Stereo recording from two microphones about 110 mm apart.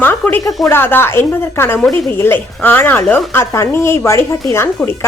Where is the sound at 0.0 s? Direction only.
15° left (ahead or behind).